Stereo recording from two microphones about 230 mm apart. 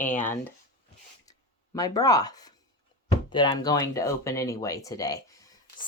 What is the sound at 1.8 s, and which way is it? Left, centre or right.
A woman's voice, centre.